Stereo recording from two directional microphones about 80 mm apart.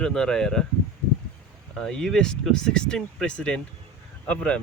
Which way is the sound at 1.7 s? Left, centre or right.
Centre.